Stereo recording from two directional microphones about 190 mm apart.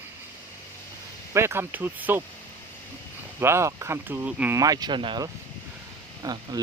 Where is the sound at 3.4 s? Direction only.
15° right (ahead or behind).